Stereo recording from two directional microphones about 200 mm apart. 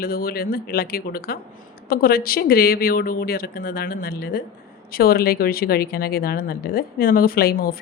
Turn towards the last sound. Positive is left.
turn(degrees=50)  # may be behind; listen again after turning